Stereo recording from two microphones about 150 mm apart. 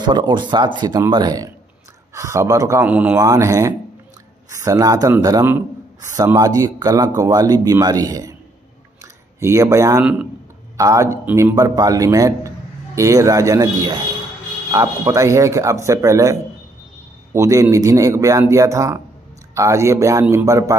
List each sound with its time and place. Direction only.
0.0 s speech: 30° right (ahead or behind)
2.9 s speech: 10° right (ahead or behind)
3.2 s speech: 20° right (ahead or behind)
11.2 s speech: 10° right (ahead or behind)
11.5 s a man's voice: 25° right (ahead or behind)